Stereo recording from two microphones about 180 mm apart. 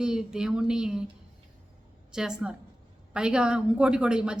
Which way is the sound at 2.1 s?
5° right (ahead or behind).